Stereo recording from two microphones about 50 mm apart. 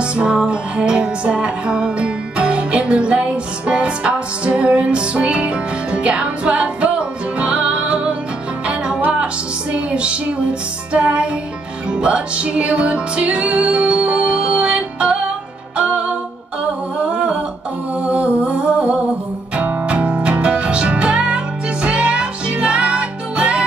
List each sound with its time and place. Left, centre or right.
0.0 s music: right
17.0 s humming: right
19.5 s music: right